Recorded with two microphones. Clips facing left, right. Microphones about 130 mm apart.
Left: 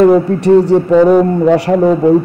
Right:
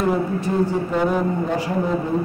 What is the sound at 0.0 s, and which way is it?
Speech, 75° left (ahead or behind).